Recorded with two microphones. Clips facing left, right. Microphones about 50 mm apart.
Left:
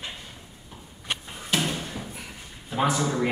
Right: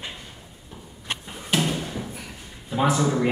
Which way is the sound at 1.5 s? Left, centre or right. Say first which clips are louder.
Right 3 dB; centre.